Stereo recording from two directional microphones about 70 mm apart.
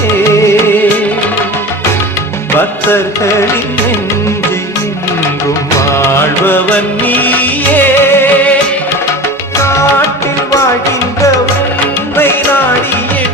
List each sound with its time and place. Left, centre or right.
5.8 s music: left